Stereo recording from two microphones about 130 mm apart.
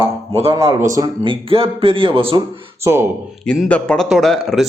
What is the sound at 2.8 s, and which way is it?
Speech, 20° right (ahead or behind).